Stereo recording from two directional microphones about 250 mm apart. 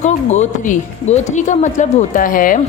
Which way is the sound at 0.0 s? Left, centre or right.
Left.